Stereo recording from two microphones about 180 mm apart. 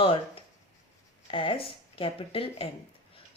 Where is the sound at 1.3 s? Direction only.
30° left (ahead or behind).